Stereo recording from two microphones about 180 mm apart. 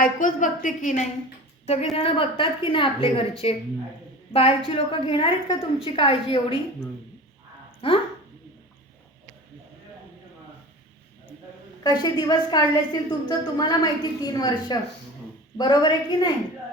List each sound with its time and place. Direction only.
0.0 s a woman's voice: 45° left (ahead or behind); by 6.6 s 30° left (ahead or behind)
11.8 s a woman's voice: 25° left (ahead or behind)